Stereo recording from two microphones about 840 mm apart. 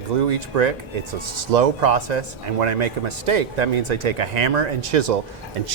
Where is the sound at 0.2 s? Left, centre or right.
Right.